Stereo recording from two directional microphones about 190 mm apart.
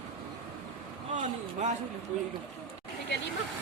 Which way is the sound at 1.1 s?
40° right (ahead or behind).